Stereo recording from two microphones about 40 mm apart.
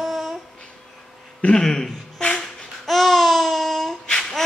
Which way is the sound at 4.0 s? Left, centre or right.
Left.